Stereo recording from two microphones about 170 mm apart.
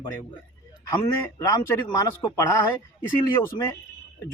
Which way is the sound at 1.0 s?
20° left (ahead or behind).